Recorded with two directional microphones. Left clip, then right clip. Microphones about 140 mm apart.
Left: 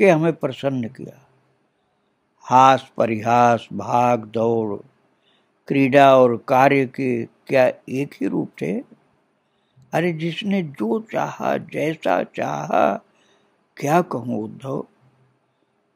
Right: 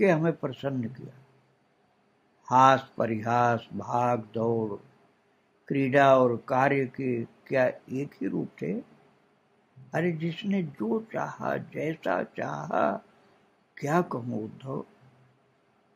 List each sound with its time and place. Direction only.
0.0 s speech: 60° left (ahead or behind)
2.4 s speech: 60° left (ahead or behind)
5.7 s speech: 70° left (ahead or behind)
9.8 s speech: 70° left (ahead or behind)